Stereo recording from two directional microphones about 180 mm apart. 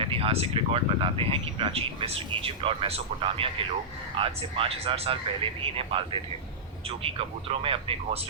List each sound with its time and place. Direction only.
0.0 s speech: 30° right (ahead or behind)